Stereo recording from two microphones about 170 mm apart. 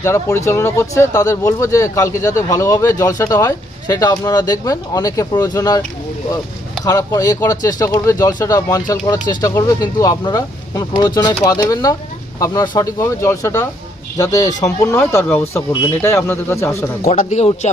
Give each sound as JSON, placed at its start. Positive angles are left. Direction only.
{"t": 0.0, "sound": "speech", "side_deg": 15}
{"t": 6.8, "sound": "speech", "side_deg": 20}
{"t": 17.1, "sound": "speech", "side_deg": 45}